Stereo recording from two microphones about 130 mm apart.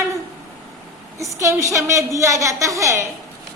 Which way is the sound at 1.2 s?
25° right (ahead or behind).